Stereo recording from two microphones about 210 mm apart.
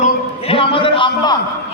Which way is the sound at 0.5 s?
25° left (ahead or behind).